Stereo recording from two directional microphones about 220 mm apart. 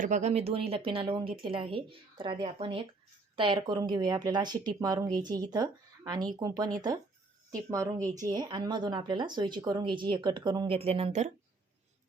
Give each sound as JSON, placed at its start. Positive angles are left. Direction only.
{"t": 0.0, "sound": "speech", "side_deg": -30}
{"t": 7.7, "sound": "speech", "side_deg": -15}